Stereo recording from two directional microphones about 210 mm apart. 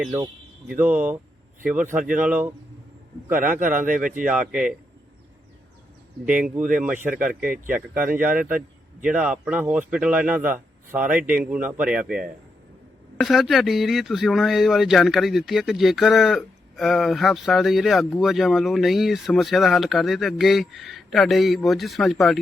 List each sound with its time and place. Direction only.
0.8 s speech: 5° right (ahead or behind)
3.8 s speech: 40° right (ahead or behind)
4.3 s speech: 5° right (ahead or behind)
6.2 s speech: 5° right (ahead or behind)
7.3 s speech: 40° right (ahead or behind)
7.7 s speech: 10° right (ahead or behind)